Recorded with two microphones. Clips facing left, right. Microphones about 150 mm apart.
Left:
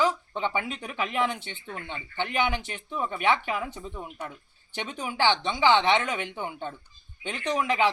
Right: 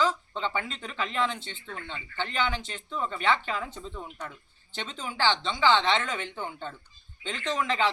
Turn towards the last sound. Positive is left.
turn(degrees=15)  # may be behind; listen again after turning